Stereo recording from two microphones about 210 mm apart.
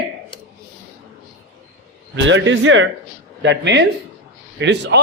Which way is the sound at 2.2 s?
60° right (ahead or behind).